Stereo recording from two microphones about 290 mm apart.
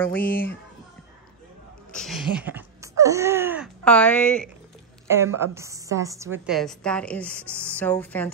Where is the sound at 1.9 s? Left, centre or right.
Centre.